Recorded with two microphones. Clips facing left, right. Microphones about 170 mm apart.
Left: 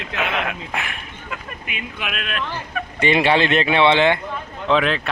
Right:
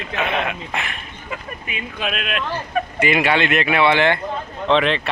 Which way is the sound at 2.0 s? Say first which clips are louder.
Right 5 dB; 30° right (ahead or behind).